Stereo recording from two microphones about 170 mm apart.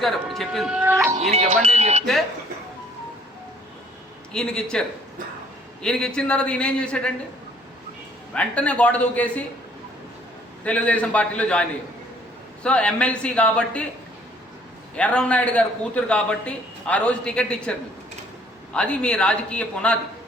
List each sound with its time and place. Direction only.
0.0 s a man's voice: centre (ahead or behind)
1.2 s speech: 40° right (ahead or behind)
4.3 s a man's voice: 5° left (ahead or behind)
8.3 s a man's voice: 5° left (ahead or behind)
10.6 s a man's voice: 10° left (ahead or behind)
14.9 s a man's voice: 5° left (ahead or behind)